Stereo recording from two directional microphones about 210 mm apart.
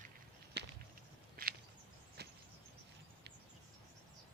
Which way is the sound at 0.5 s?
50° right (ahead or behind).